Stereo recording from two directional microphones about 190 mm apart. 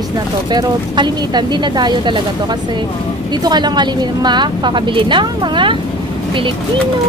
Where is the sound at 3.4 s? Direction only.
20° right (ahead or behind).